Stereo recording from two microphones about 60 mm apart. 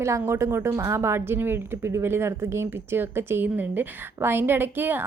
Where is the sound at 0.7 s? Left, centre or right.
Right.